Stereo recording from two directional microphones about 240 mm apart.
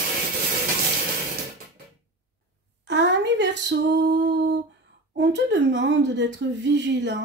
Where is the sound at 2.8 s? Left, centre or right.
Right.